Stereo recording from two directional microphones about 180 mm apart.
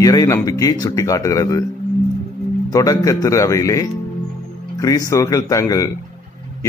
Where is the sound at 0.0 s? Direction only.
20° left (ahead or behind).